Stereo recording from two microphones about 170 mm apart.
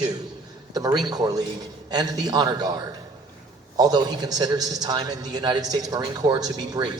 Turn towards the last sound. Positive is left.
turn(degrees=-25)  # may be behind; listen again after turning